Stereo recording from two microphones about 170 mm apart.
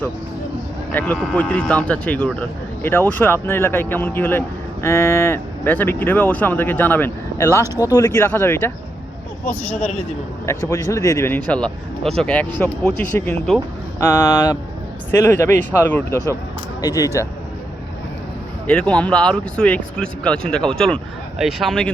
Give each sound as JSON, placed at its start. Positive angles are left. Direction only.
{"t": 0.9, "sound": "speech", "side_deg": 10}
{"t": 18.7, "sound": "speech", "side_deg": 5}